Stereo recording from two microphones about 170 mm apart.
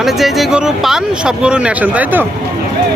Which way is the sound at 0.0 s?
Centre (ahead or behind).